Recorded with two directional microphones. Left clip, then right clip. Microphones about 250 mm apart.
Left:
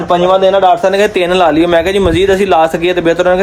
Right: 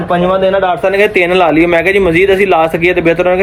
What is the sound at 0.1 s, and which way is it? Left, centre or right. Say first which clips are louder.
A man's voice: left 2 dB; left.